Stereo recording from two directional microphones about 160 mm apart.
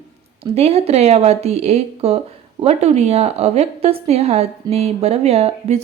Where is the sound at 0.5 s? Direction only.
40° right (ahead or behind).